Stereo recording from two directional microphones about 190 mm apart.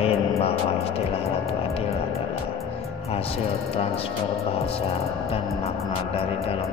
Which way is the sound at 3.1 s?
30° left (ahead or behind).